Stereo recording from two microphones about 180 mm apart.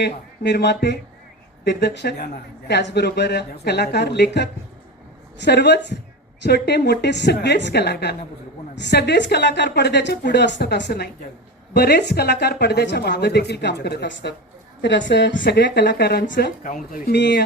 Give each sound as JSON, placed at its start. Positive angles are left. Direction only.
{"t": 0.0, "sound": "speech", "side_deg": 70}
{"t": 14.8, "sound": "speech", "side_deg": 85}